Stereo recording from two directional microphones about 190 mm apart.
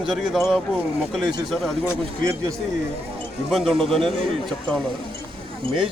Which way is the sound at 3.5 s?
Centre (ahead or behind).